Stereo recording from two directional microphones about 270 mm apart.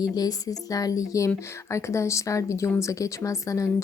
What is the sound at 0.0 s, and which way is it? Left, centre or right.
Speech, centre.